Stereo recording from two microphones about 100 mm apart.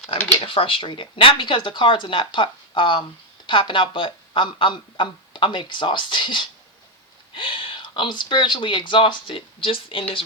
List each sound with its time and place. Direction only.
0.4 s speech: 60° left (ahead or behind)